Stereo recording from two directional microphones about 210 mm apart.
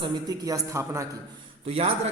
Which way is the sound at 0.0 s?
20° right (ahead or behind).